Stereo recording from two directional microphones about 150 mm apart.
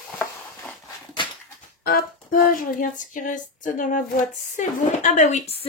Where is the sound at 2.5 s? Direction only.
65° left (ahead or behind).